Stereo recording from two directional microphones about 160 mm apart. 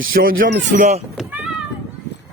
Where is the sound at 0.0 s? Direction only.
65° right (ahead or behind).